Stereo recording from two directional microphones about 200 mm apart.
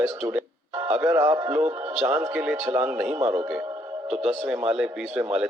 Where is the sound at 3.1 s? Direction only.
30° right (ahead or behind).